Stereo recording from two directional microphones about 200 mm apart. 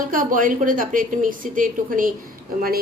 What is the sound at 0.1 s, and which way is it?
A woman's voice, 40° right (ahead or behind).